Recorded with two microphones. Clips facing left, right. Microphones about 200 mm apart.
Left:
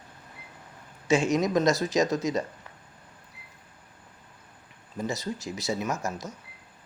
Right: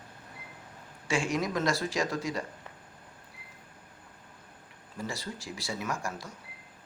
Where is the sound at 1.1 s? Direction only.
20° left (ahead or behind).